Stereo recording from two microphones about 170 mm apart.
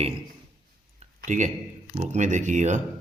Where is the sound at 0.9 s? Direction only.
45° right (ahead or behind).